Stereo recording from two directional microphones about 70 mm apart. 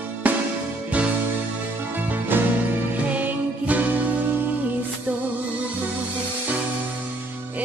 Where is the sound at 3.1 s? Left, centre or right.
Right.